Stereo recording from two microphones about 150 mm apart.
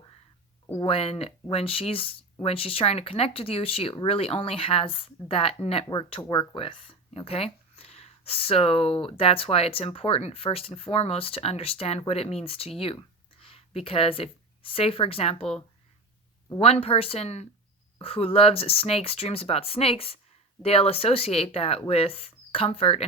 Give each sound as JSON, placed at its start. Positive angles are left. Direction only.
{"t": 0.8, "sound": "speech", "side_deg": 40}
{"t": 16.6, "sound": "speech", "side_deg": 40}